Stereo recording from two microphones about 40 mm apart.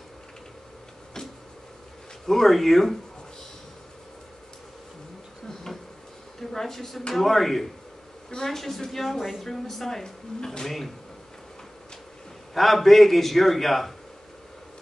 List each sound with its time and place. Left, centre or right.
2.2 s a woman's voice: centre
6.5 s a woman's voice: centre
12.5 s a woman's voice: centre